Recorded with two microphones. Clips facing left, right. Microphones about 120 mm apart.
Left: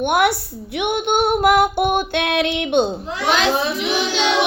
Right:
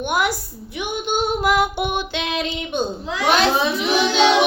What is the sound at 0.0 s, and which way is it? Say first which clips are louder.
A woman's voice: left 4 dB; 60° left (ahead or behind).